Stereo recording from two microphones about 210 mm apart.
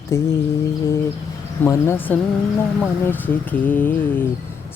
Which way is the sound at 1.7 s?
10° left (ahead or behind).